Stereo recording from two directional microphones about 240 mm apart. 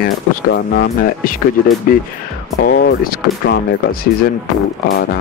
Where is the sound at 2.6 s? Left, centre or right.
Left.